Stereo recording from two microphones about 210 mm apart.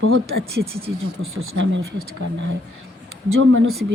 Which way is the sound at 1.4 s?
65° right (ahead or behind).